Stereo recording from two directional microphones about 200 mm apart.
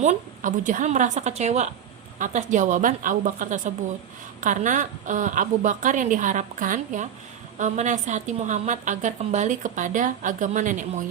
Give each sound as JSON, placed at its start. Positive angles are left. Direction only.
{"t": 0.0, "sound": "a woman's voice", "side_deg": -40}